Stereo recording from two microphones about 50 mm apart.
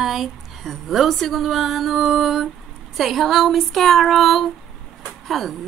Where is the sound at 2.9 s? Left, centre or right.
Centre.